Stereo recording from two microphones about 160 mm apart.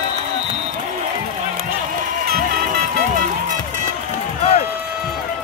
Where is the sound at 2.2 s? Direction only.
65° right (ahead or behind).